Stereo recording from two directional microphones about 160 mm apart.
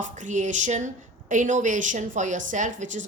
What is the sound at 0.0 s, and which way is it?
A woman's voice, 50° right (ahead or behind).